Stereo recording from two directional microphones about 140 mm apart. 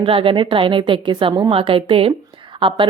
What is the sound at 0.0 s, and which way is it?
A woman's voice, 40° right (ahead or behind).